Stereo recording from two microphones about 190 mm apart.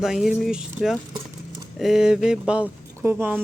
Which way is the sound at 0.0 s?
Centre (ahead or behind).